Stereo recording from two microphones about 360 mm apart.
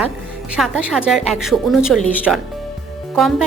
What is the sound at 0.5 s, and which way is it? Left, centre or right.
A woman's voice, centre.